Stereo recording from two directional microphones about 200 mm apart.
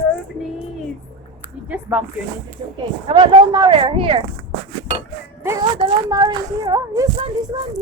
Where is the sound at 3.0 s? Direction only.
20° right (ahead or behind).